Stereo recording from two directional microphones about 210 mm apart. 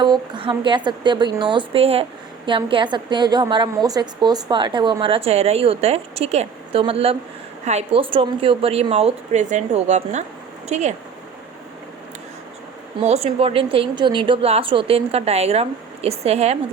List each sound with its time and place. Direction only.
0.0 s a woman's voice: 25° right (ahead or behind)
13.0 s a woman's voice: 30° right (ahead or behind)